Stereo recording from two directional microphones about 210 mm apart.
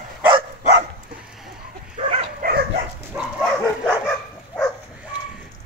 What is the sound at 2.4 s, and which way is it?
Dog, 40° right (ahead or behind).